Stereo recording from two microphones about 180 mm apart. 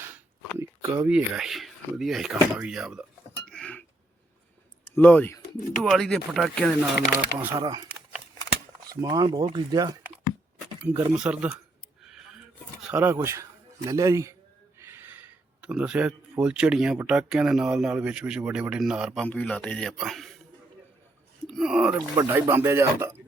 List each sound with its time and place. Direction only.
0.0 s a sound: 10° right (ahead or behind)
1.0 s speech: 5° right (ahead or behind)
4.9 s speech: 10° left (ahead or behind)
7.4 s speech: 20° right (ahead or behind)
8.9 s speech: 20° right (ahead or behind)
10.9 s speech: 20° right (ahead or behind)
11.2 s speech: 5° right (ahead or behind)
12.9 s a man's voice: 10° right (ahead or behind)
14.8 s a sound: 15° right (ahead or behind)
16.4 s speech: 5° right (ahead or behind)
21.4 s a sound: 5° right (ahead or behind)
22.1 s speech: 15° right (ahead or behind)